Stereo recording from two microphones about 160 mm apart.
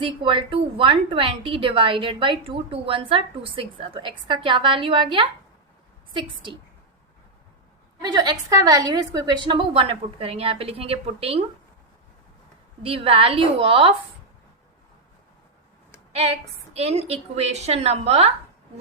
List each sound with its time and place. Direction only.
0.0 s a woman's voice: 35° right (ahead or behind)
8.0 s a woman's voice: 25° right (ahead or behind)
12.8 s a woman's voice: 35° right (ahead or behind)
16.7 s a woman's voice: 40° right (ahead or behind)